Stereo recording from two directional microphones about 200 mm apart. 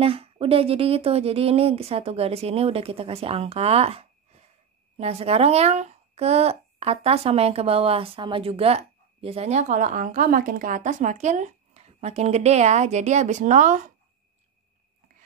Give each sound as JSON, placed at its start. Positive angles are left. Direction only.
{"t": 0.0, "sound": "a woman's voice", "side_deg": -30}